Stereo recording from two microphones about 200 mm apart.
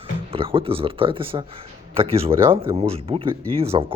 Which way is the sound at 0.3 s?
25° right (ahead or behind).